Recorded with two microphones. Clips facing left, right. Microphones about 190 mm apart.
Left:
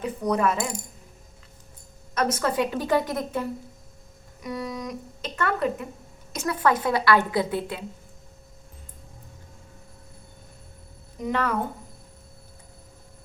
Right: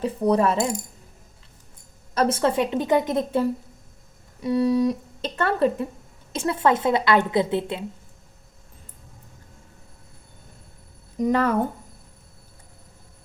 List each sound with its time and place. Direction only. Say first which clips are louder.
0.0 s speech: right 4 dB; 30° right (ahead or behind)
2.1 s a woman's voice: right 3 dB; 30° right (ahead or behind)
11.2 s speech: right 6 dB; 40° right (ahead or behind)